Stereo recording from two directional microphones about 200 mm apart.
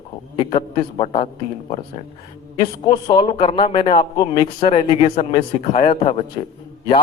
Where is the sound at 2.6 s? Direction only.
25° left (ahead or behind).